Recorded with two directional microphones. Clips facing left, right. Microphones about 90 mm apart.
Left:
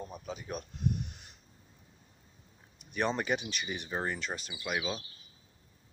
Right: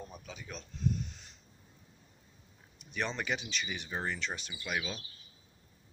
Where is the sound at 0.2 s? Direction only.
45° left (ahead or behind).